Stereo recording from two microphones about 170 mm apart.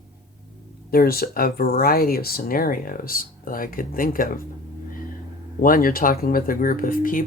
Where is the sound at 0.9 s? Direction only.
60° left (ahead or behind).